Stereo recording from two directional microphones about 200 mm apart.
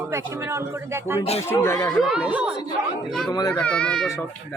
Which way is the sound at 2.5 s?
20° left (ahead or behind).